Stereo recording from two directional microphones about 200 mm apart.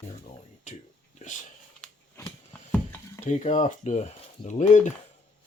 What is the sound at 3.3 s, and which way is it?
Speech, 35° left (ahead or behind).